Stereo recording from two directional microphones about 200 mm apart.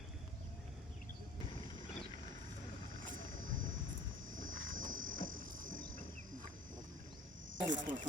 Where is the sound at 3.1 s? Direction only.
40° right (ahead or behind).